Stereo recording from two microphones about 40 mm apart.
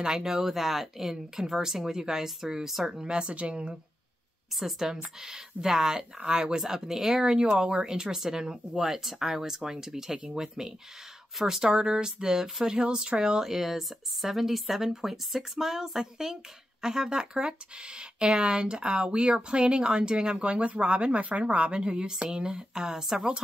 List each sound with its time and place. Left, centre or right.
0.0 s speech: centre
2.9 s speech: right
4.6 s speech: centre
4.8 s speech: centre
10.1 s speech: right
11.3 s speech: centre
11.6 s speech: centre